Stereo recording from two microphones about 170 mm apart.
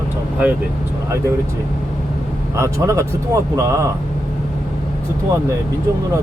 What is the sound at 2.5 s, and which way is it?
Speech, 15° right (ahead or behind).